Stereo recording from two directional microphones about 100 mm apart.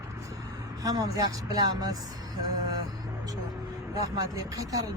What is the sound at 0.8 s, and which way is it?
Speech, 35° right (ahead or behind).